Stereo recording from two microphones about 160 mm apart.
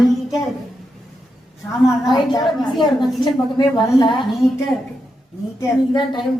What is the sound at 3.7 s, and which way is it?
Speech, 25° left (ahead or behind).